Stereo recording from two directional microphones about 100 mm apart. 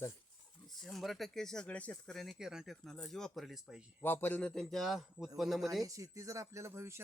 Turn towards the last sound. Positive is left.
turn(degrees=-25)  # may be behind; listen again after turning